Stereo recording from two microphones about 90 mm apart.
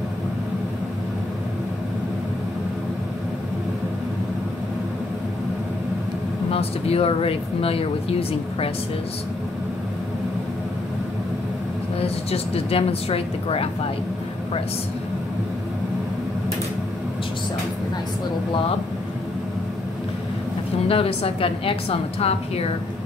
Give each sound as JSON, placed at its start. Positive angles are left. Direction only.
{"t": 6.5, "sound": "speech", "side_deg": 90}
{"t": 12.0, "sound": "speech", "side_deg": 90}
{"t": 20.9, "sound": "speech", "side_deg": 90}